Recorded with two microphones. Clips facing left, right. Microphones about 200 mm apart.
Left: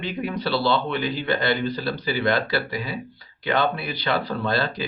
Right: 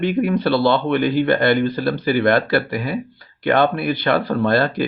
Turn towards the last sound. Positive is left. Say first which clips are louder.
# right 7 dB
turn(degrees=-55)  # may be behind; listen again after turning